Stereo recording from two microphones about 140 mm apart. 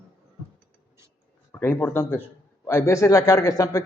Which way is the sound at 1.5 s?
15° left (ahead or behind).